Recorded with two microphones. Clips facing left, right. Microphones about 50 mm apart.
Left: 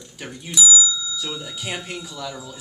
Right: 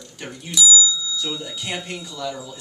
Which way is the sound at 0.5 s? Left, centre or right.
Left.